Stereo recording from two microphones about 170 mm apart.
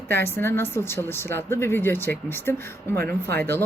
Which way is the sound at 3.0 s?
70° right (ahead or behind).